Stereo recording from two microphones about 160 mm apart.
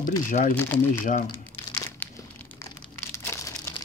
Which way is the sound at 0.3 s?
50° left (ahead or behind).